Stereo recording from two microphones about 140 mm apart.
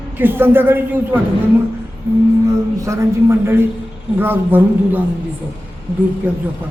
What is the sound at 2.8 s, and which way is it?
A man's voice, 20° right (ahead or behind).